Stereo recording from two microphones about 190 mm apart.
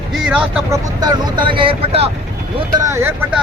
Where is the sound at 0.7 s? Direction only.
20° right (ahead or behind).